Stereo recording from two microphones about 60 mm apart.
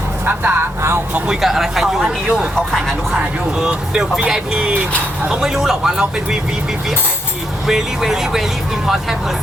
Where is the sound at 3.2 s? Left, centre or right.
Centre.